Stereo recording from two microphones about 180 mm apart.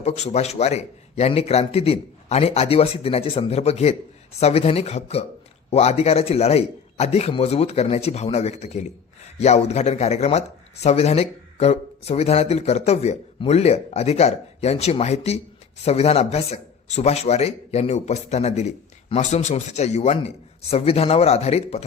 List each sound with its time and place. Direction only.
0.0 s a man's voice: 35° left (ahead or behind)